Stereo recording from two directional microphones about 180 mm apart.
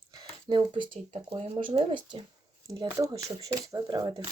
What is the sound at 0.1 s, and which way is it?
Speech, 25° right (ahead or behind).